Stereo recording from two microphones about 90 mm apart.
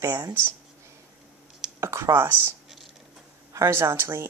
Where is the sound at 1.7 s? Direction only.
30° right (ahead or behind).